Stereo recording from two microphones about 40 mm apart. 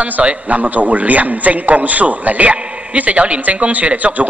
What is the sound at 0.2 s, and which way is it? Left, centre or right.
A man's voice, right.